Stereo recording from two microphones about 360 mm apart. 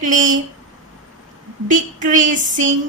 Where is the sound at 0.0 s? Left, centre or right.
Right.